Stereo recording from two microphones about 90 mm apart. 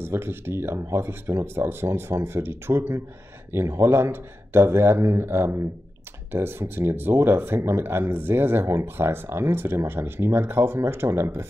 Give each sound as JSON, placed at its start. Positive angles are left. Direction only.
{"t": 0.0, "sound": "speech", "side_deg": -25}